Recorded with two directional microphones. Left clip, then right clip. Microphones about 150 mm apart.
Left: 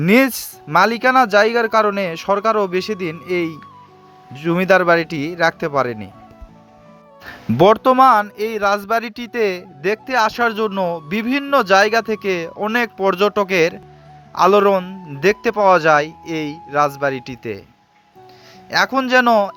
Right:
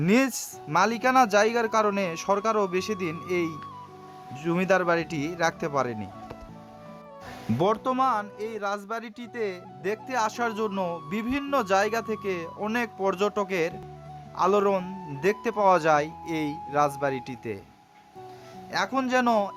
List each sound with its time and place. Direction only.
0.0 s speech: 40° left (ahead or behind)
7.6 s speech: 45° left (ahead or behind); by 17.6 s 25° left (ahead or behind)
18.7 s speech: 35° left (ahead or behind)